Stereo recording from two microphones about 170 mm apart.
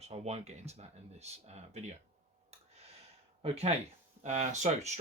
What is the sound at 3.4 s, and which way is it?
Speech, 35° right (ahead or behind).